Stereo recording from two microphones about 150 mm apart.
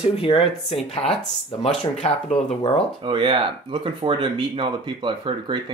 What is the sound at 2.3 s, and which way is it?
Speech, 40° left (ahead or behind).